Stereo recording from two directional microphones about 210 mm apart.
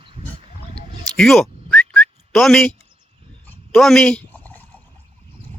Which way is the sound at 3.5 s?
Centre (ahead or behind).